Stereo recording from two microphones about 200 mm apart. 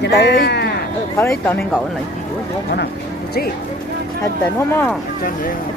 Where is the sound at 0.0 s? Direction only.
60° left (ahead or behind).